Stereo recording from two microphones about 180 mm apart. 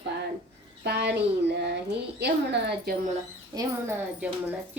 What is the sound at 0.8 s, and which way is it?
Speech, 65° right (ahead or behind).